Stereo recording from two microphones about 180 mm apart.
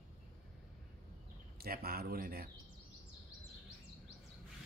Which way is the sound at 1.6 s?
55° right (ahead or behind).